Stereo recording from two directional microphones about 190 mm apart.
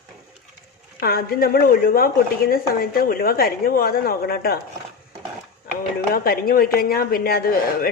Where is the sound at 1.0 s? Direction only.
55° left (ahead or behind).